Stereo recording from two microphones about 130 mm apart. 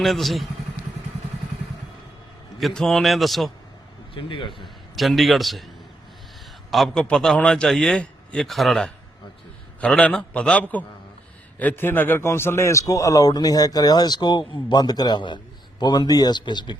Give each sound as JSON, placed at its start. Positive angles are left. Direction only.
{"t": 0.0, "sound": "a man's voice", "side_deg": 0}
{"t": 2.6, "sound": "a man's voice", "side_deg": 0}
{"t": 4.1, "sound": "speech", "side_deg": 40}
{"t": 4.6, "sound": "a man's voice", "side_deg": 0}
{"t": 6.7, "sound": "a man's voice", "side_deg": 0}